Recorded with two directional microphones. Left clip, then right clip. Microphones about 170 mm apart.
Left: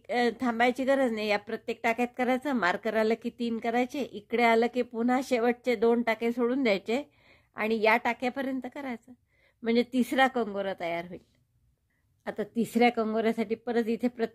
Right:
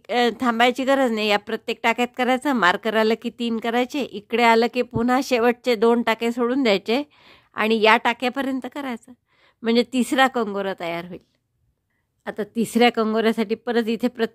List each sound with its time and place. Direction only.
0.0 s speech: 45° right (ahead or behind)
12.3 s a woman's voice: 35° right (ahead or behind)